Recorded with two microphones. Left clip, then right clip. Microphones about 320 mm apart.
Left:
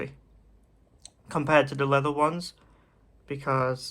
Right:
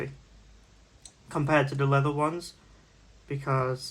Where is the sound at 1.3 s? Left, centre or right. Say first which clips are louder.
Left 3 dB; left.